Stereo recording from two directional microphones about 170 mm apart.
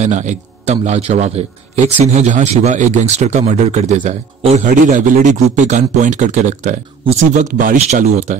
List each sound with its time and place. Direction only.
0.0 s a man's voice: 45° right (ahead or behind)